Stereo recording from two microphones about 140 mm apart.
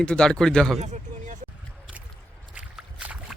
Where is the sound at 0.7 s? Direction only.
55° right (ahead or behind).